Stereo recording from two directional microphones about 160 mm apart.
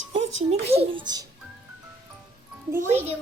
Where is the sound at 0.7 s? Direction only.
35° right (ahead or behind).